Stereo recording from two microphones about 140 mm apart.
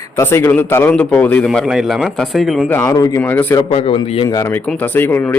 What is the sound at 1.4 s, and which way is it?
A man's voice, 5° right (ahead or behind).